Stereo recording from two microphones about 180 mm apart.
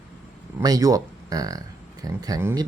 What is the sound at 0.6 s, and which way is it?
Speech, 20° right (ahead or behind).